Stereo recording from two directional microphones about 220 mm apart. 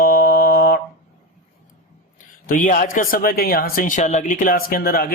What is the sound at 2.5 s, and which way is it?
Speech, 40° left (ahead or behind).